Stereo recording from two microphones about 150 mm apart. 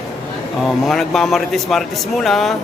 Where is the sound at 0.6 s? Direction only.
Centre (ahead or behind).